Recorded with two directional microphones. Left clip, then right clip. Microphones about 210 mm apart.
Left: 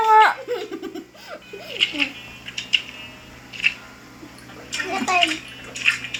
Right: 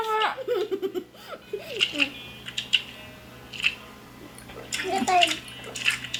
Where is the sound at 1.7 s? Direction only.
5° left (ahead or behind).